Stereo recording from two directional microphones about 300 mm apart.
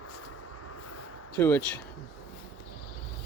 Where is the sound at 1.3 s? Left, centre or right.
Centre.